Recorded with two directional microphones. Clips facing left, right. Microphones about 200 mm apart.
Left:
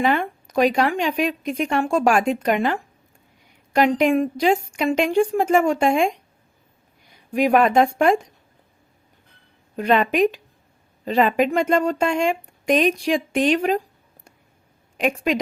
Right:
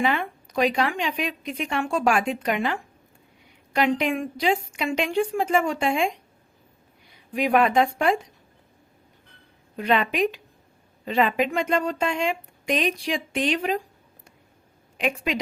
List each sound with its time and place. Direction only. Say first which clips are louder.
0.0 s speech: left 4 dB; 45° left (ahead or behind)
7.3 s speech: left 4 dB; 45° left (ahead or behind)
9.7 s speech: left 4 dB; 45° left (ahead or behind)
14.9 s a woman's voice: left 5 dB; 45° left (ahead or behind)